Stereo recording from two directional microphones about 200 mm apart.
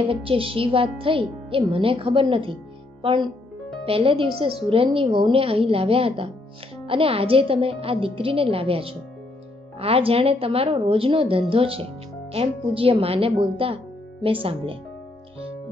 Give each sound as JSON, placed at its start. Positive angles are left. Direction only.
{"t": 0.0, "sound": "speech", "side_deg": -25}